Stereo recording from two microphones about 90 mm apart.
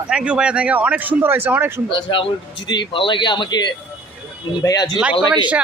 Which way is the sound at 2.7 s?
65° left (ahead or behind).